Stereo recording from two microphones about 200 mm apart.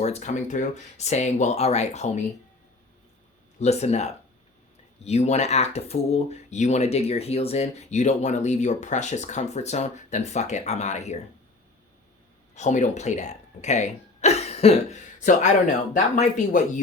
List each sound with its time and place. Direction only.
0.0 s speech: 35° left (ahead or behind)
3.6 s speech: 30° left (ahead or behind)
12.5 s speech: 35° left (ahead or behind)